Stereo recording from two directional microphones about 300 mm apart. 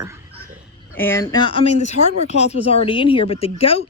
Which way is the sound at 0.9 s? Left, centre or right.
Centre.